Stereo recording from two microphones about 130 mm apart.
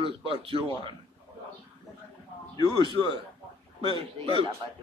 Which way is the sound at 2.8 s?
35° left (ahead or behind).